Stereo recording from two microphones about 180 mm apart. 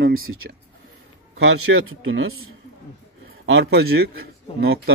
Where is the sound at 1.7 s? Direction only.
70° right (ahead or behind).